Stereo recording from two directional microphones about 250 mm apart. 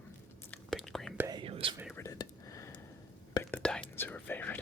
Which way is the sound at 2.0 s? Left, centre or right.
Centre.